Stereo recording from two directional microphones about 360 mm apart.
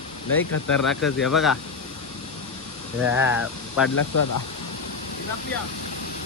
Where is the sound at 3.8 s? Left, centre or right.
Left.